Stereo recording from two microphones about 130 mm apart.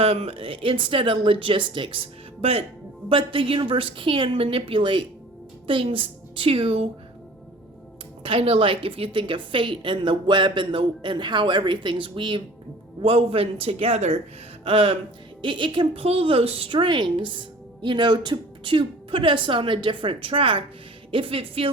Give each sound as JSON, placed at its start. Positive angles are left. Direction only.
{"t": 0.0, "sound": "a woman's voice", "side_deg": -50}
{"t": 8.2, "sound": "a woman's voice", "side_deg": -45}
{"t": 14.6, "sound": "music", "side_deg": -45}
{"t": 15.4, "sound": "a woman's voice", "side_deg": -40}